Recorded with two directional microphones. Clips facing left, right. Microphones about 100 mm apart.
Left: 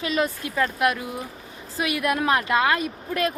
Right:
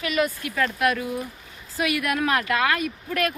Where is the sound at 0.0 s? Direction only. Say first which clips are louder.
Even; 30° left (ahead or behind).